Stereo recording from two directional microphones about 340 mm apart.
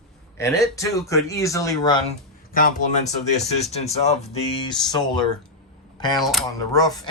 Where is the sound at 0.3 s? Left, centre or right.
Centre.